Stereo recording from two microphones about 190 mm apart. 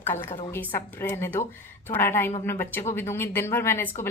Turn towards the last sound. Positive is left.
turn(degrees=10)  # may be behind; listen again after turning